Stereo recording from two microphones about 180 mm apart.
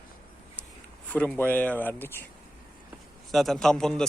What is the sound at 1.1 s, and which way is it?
Speech, 5° left (ahead or behind).